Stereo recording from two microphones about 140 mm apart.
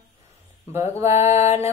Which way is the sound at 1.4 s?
20° right (ahead or behind).